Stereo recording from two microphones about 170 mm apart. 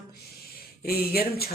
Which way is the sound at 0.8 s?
65° left (ahead or behind).